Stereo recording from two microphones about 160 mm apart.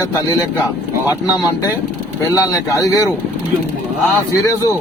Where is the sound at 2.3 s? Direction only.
20° left (ahead or behind).